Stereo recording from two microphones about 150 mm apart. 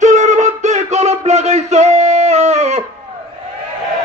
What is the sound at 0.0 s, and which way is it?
Music, 50° right (ahead or behind).